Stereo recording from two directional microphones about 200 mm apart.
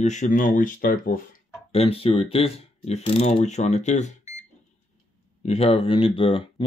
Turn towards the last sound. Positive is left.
turn(degrees=25)  # may be behind; listen again after turning